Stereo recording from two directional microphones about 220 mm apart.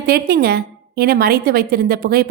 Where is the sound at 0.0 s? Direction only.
45° right (ahead or behind).